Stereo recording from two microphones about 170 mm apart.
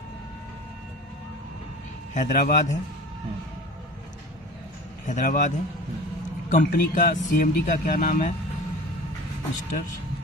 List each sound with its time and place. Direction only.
2.1 s a man's voice: 50° left (ahead or behind)
5.0 s a man's voice: 50° left (ahead or behind)